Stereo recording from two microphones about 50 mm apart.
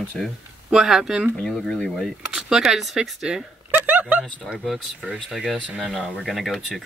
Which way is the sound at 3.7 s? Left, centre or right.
Right.